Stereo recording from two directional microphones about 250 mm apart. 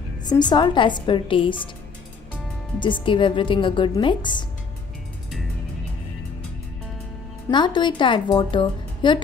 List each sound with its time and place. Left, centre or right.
0.2 s speech: centre
2.8 s speech: centre
7.4 s speech: centre